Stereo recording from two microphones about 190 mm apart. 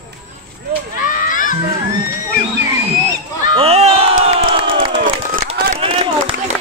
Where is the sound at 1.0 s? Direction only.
45° left (ahead or behind).